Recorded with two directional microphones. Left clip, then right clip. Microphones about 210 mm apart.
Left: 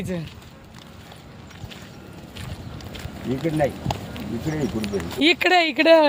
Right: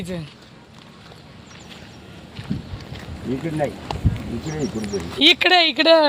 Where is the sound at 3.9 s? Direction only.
25° left (ahead or behind).